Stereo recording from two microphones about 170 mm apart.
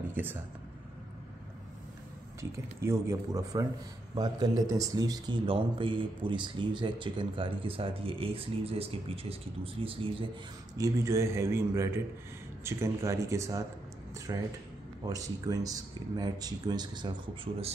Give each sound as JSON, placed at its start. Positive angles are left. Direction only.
{"t": 0.1, "sound": "a sound", "side_deg": -10}
{"t": 2.5, "sound": "a man's voice", "side_deg": -15}
{"t": 10.8, "sound": "a man's voice", "side_deg": -15}